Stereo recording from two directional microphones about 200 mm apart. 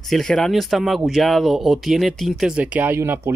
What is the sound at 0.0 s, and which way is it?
Speech, centre (ahead or behind).